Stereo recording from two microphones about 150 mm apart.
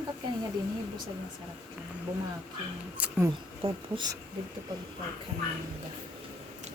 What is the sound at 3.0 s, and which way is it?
Speech, 10° right (ahead or behind).